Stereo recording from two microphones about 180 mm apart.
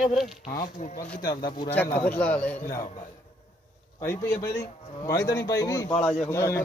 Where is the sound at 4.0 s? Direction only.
15° left (ahead or behind).